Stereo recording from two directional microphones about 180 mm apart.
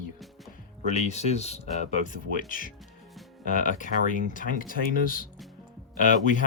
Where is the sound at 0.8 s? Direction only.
40° left (ahead or behind).